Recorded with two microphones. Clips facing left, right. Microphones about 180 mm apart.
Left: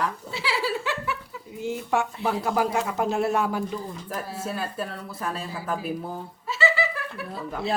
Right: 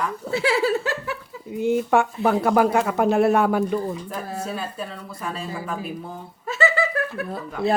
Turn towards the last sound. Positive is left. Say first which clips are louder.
# right 5 dB
turn(degrees=-55)  # may be behind; listen again after turning